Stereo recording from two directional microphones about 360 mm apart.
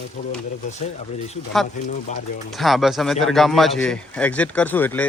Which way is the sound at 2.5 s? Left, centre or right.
Centre.